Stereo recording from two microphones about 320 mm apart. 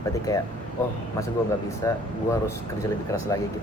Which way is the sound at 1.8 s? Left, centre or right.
Centre.